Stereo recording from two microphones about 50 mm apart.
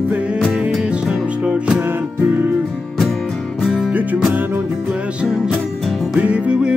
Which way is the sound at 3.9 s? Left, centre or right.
Right.